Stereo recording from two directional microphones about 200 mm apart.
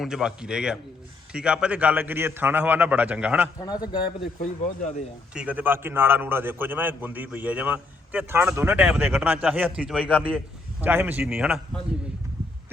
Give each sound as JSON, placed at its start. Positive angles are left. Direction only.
{"t": 0.0, "sound": "a man's voice", "side_deg": -5}
{"t": 3.6, "sound": "a man's voice", "side_deg": 20}
{"t": 5.3, "sound": "a man's voice", "side_deg": -5}